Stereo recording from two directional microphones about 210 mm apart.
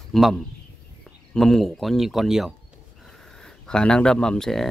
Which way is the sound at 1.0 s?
Centre (ahead or behind).